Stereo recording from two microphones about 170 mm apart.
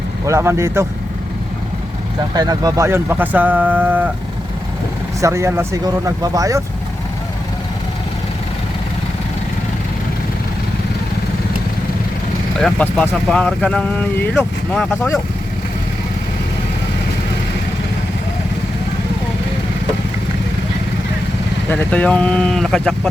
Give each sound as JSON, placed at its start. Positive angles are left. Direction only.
{"t": 0.3, "sound": "speech", "side_deg": -15}
{"t": 2.3, "sound": "speech", "side_deg": -25}
{"t": 5.2, "sound": "speech", "side_deg": -15}
{"t": 12.5, "sound": "speech", "side_deg": 5}
{"t": 21.7, "sound": "speech", "side_deg": 10}